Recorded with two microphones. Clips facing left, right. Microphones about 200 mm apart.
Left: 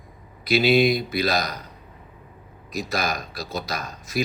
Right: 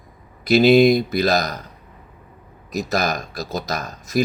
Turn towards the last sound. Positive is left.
turn(degrees=-45)  # may be behind; listen again after turning